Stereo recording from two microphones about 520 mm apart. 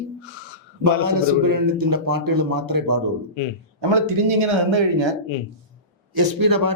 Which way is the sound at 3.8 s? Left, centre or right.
Right.